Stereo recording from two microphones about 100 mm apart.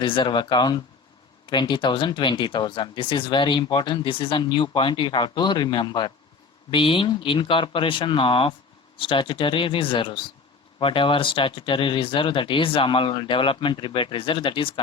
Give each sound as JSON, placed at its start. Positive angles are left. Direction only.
{"t": 0.0, "sound": "speech", "side_deg": 55}
{"t": 6.7, "sound": "speech", "side_deg": 60}